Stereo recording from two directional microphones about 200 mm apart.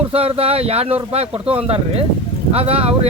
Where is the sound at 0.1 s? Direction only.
30° right (ahead or behind).